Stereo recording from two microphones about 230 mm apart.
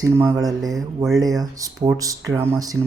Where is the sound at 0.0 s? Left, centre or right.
Centre.